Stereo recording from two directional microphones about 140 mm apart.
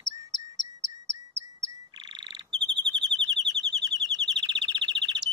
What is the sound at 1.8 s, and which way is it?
Frog, 30° right (ahead or behind).